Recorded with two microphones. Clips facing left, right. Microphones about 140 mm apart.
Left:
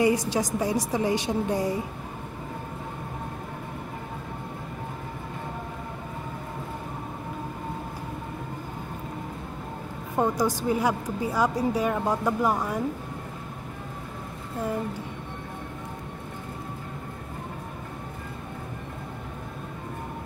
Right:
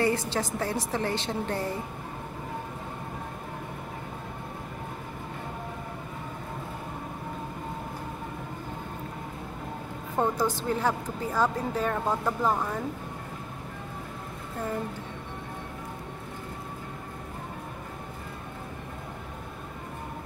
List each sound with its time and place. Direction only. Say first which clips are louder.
0.0 s a woman's voice: left 4 dB; 15° left (ahead or behind)
10.1 s a woman's voice: left 2 dB; 15° left (ahead or behind)